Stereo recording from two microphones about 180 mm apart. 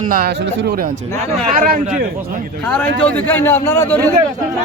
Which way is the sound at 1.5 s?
55° right (ahead or behind).